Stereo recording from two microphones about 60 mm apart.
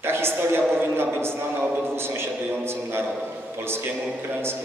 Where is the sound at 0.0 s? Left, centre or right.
Right.